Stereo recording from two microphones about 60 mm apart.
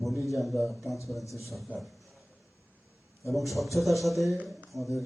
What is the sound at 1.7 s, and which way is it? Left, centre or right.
Speech, right.